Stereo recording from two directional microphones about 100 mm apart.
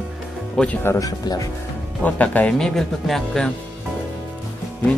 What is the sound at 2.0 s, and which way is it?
Speech, 15° left (ahead or behind).